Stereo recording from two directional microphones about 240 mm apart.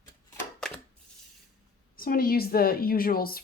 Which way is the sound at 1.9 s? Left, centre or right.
Left.